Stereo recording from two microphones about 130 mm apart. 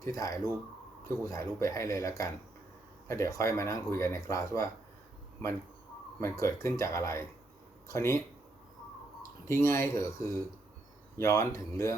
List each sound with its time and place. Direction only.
0.0 s speech: 25° left (ahead or behind)
6.1 s speech: 25° left (ahead or behind)
9.5 s speech: 20° left (ahead or behind)